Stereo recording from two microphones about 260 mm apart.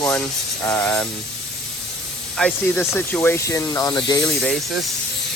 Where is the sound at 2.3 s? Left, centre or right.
Centre.